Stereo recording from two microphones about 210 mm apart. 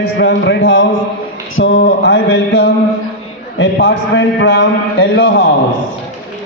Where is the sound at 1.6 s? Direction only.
55° left (ahead or behind).